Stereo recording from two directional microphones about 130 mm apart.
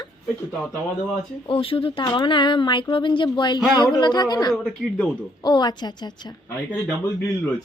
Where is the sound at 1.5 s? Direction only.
45° left (ahead or behind).